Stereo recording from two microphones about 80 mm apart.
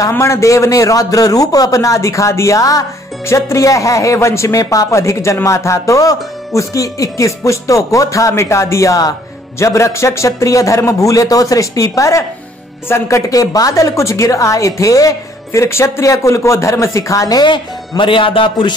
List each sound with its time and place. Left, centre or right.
0.2 s a man's voice: left
13.3 s speech: left
17.4 s speech: left